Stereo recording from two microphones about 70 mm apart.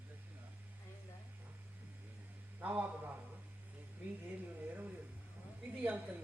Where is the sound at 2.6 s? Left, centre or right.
Right.